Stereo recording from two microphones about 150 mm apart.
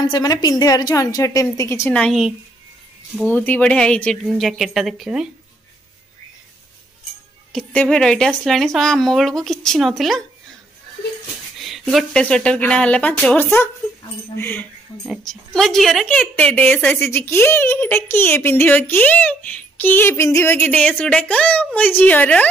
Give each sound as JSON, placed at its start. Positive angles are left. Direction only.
{"t": 0.1, "sound": "a woman's voice", "side_deg": 25}
{"t": 2.0, "sound": "speech", "side_deg": 0}
{"t": 3.3, "sound": "speech", "side_deg": 10}
{"t": 7.5, "sound": "speech", "side_deg": 5}
{"t": 11.6, "sound": "a woman's voice", "side_deg": 0}
{"t": 15.0, "sound": "a woman's voice", "side_deg": 5}